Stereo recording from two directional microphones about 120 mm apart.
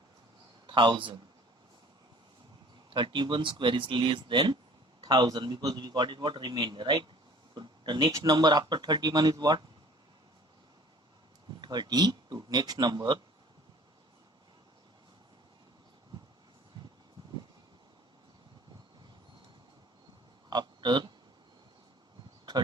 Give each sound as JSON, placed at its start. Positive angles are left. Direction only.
{"t": 0.7, "sound": "speech", "side_deg": -40}
{"t": 2.9, "sound": "speech", "side_deg": -45}
{"t": 11.6, "sound": "speech", "side_deg": -35}
{"t": 16.7, "sound": "a sound", "side_deg": -35}
{"t": 20.5, "sound": "speech", "side_deg": -35}